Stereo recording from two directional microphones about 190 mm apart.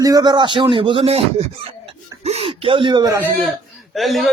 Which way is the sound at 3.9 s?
Centre (ahead or behind).